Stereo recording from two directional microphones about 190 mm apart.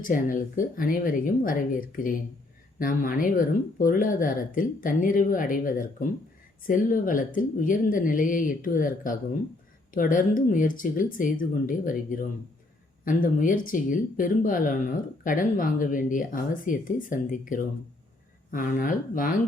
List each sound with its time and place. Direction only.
0.0 s speech: 45° left (ahead or behind)